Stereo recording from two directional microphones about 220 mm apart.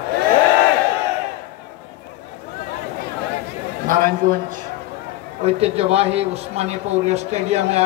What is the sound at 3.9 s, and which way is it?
Speech, 40° right (ahead or behind).